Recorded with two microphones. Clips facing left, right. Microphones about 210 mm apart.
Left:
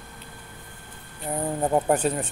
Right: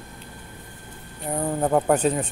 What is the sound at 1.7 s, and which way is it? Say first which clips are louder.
Speech: right 2 dB; 15° left (ahead or behind).